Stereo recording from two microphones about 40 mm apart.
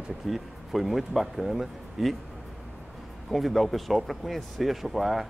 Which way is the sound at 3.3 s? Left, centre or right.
Centre.